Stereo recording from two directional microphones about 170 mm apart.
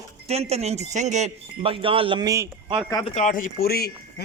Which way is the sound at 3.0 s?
45° left (ahead or behind).